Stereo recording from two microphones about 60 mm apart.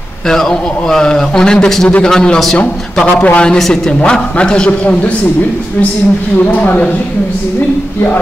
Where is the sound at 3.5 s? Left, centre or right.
Centre; by 7.0 s left.